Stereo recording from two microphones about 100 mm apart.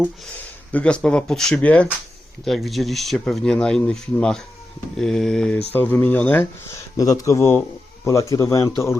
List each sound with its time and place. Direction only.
0.7 s speech: 10° left (ahead or behind)
2.4 s speech: centre (ahead or behind)
5.7 s speech: 15° left (ahead or behind)
6.9 s speech: 35° left (ahead or behind)